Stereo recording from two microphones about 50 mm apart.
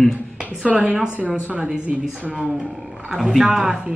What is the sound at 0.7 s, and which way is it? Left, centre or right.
Speech, right.